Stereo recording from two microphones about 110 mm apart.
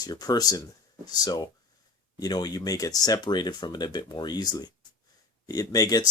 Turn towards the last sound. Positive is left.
turn(degrees=35)  # may be behind; listen again after turning